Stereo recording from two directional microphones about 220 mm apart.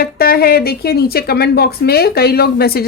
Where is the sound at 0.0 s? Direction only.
45° left (ahead or behind).